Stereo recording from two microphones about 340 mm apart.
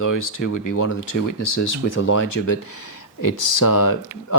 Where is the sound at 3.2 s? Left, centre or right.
Left.